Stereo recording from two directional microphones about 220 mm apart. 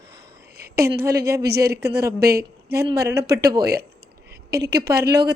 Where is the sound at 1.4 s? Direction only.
45° right (ahead or behind).